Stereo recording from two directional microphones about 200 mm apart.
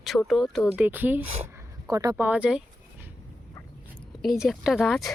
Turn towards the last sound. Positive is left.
turn(degrees=0)  # may be behind; listen again after turning